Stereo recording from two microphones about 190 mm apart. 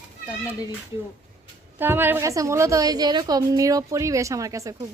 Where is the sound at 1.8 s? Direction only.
10° right (ahead or behind).